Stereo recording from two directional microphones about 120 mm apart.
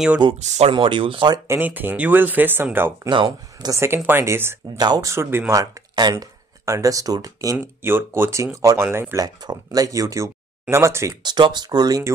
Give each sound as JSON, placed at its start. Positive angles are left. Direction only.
{"t": 0.4, "sound": "speech", "side_deg": -75}
{"t": 0.7, "sound": "speech", "side_deg": -45}
{"t": 1.5, "sound": "speech", "side_deg": -15}
{"t": 3.1, "sound": "speech", "side_deg": -40}
{"t": 3.7, "sound": "speech", "side_deg": -20}
{"t": 4.7, "sound": "speech", "side_deg": -35}
{"t": 5.1, "sound": "speech", "side_deg": -20}
{"t": 7.5, "sound": "speech", "side_deg": -20}
{"t": 9.2, "sound": "speech", "side_deg": -35}
{"t": 11.2, "sound": "speech", "side_deg": -40}